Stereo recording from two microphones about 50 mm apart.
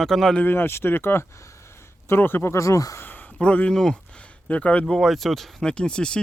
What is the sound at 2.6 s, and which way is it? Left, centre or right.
Speech, left.